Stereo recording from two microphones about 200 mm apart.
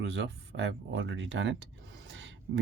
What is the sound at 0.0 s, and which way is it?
Speech, 60° right (ahead or behind).